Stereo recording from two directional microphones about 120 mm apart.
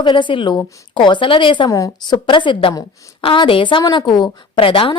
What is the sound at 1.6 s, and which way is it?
A woman's voice, 30° left (ahead or behind).